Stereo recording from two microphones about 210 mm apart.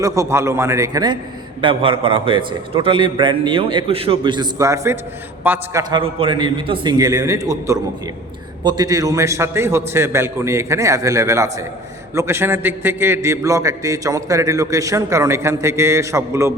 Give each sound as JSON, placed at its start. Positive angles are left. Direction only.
{"t": 0.0, "sound": "a man's voice", "side_deg": -15}
{"t": 5.9, "sound": "a man's voice", "side_deg": -25}